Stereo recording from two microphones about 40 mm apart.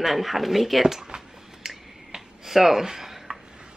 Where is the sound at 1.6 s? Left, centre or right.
Centre.